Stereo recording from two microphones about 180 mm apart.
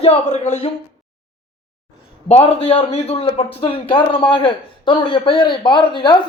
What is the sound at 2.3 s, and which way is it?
A man's voice, 35° left (ahead or behind).